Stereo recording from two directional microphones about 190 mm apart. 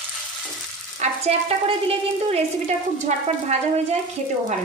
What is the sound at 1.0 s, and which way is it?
Frying, 35° right (ahead or behind).